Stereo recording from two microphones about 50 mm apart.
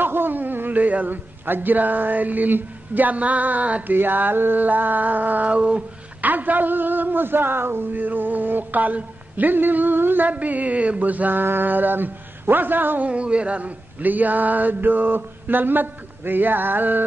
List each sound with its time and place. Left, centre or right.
0.0 s a man's voice: right
13.1 s a man's voice: right